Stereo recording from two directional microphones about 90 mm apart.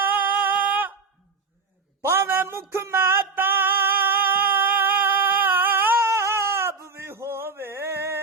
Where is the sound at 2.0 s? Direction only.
30° right (ahead or behind).